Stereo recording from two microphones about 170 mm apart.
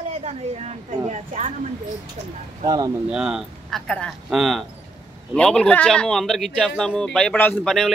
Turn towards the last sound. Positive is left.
turn(degrees=5)  # may be behind; listen again after turning